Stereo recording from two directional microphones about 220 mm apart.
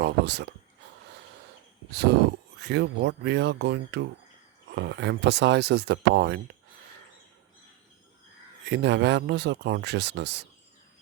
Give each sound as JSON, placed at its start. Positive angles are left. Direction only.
{"t": 0.0, "sound": "speech", "side_deg": -50}
{"t": 2.6, "sound": "speech", "side_deg": -50}
{"t": 8.6, "sound": "speech", "side_deg": -50}